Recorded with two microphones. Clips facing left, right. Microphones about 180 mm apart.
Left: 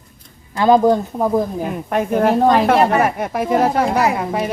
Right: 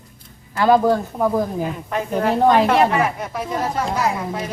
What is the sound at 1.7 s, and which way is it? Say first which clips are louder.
A woman's voice: left 5 dB; 55° left (ahead or behind).